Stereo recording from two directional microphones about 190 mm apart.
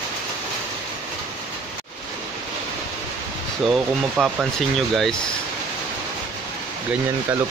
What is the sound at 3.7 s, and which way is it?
Speech, 5° right (ahead or behind).